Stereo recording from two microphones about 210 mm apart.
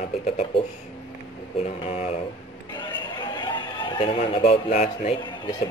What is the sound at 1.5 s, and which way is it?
Speech, 30° left (ahead or behind).